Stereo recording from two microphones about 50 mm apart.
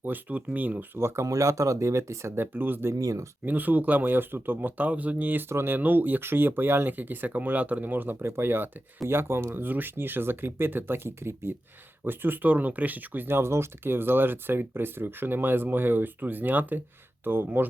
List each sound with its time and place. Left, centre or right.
0.0 s speech: right
0.9 s speech: right
2.9 s speech: right
3.4 s speech: right
5.5 s speech: right
5.7 s speech: right
12.0 s speech: right
13.2 s speech: right